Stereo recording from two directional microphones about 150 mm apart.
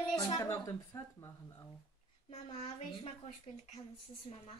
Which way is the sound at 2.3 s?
50° left (ahead or behind).